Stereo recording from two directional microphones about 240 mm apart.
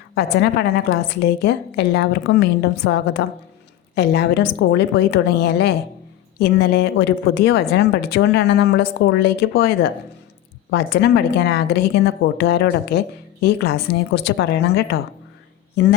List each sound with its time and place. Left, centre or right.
0.1 s a woman's voice: left